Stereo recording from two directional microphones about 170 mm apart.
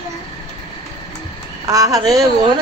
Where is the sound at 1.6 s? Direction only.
20° right (ahead or behind).